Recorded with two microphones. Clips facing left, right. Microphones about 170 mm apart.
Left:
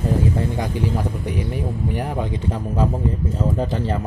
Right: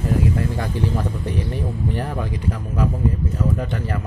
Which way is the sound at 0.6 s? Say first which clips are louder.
Left 1 dB; 10° left (ahead or behind).